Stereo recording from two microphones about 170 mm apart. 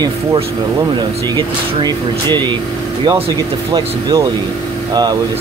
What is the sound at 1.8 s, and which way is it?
Speech, 25° right (ahead or behind).